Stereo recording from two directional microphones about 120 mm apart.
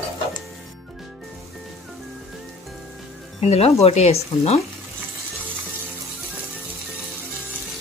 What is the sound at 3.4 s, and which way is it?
Speech, 60° left (ahead or behind).